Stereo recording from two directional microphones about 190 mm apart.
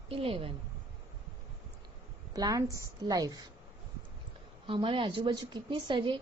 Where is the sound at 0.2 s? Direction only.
30° right (ahead or behind).